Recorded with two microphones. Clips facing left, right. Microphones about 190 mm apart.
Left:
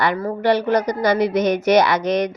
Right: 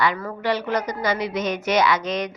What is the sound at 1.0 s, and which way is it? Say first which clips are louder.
A woman's voice: left 7 dB; 65° left (ahead or behind).